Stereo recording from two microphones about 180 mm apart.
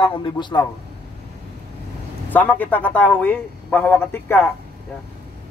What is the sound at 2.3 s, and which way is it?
A man's voice, 10° left (ahead or behind).